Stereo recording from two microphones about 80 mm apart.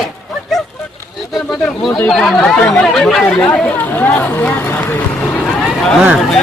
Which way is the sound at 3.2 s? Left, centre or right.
Centre.